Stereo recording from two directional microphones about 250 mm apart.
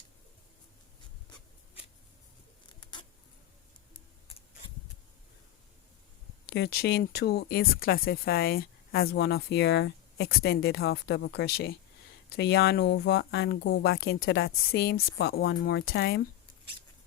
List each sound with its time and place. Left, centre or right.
6.5 s speech: left